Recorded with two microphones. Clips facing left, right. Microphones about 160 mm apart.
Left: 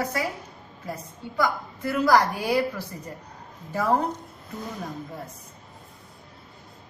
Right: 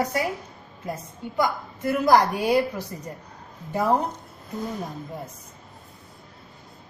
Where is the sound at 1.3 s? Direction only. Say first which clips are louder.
Right 1 dB; 20° right (ahead or behind).